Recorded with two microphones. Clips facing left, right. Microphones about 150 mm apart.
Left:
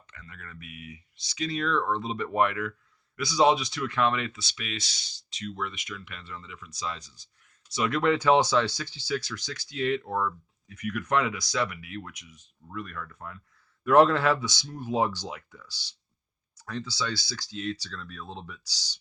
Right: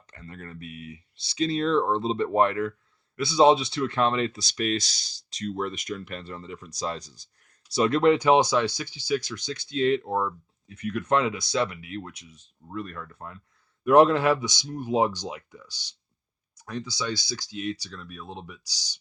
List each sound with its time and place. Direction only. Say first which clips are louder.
0.1 s speech: right 6 dB; 35° right (ahead or behind)
13.8 s speech: right 2 dB; 15° right (ahead or behind)